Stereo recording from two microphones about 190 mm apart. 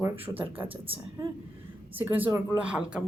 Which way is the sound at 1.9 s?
10° right (ahead or behind).